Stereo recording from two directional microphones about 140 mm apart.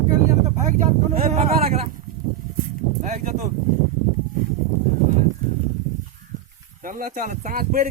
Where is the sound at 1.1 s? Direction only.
50° right (ahead or behind).